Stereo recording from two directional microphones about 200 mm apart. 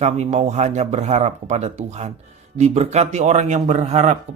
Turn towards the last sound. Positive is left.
turn(degrees=-35)  # may be behind; listen again after turning